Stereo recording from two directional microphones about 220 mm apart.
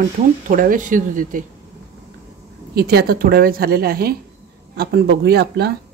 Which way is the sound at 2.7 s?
45° right (ahead or behind).